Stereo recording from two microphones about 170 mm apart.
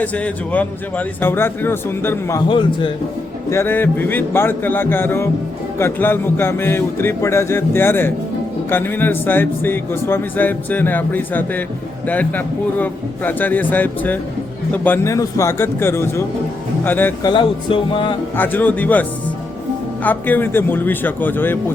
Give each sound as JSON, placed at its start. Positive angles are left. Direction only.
{"t": 0.0, "sound": "speech", "side_deg": 10}
{"t": 2.5, "sound": "music", "side_deg": 30}
{"t": 3.5, "sound": "speech", "side_deg": 15}
{"t": 17.2, "sound": "music", "side_deg": 30}
{"t": 18.3, "sound": "speech", "side_deg": 10}
{"t": 20.1, "sound": "speech", "side_deg": 10}